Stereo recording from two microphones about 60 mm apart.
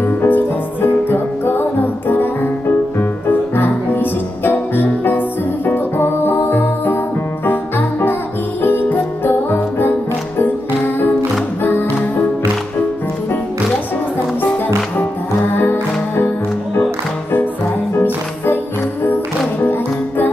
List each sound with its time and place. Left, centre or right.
0.2 s music: left
8.6 s music: left
15.5 s music: left
17.9 s music: left
19.6 s music: left